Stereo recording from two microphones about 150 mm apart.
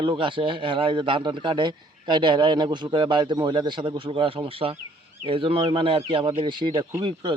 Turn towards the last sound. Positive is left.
turn(degrees=-30)  # may be behind; listen again after turning